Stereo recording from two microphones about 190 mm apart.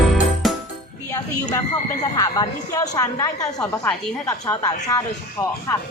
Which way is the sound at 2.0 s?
20° left (ahead or behind).